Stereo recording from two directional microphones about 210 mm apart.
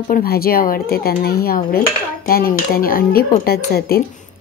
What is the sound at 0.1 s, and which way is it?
Speech, 45° left (ahead or behind).